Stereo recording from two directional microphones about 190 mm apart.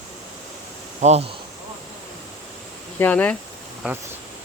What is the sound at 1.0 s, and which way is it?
Speech, 35° right (ahead or behind).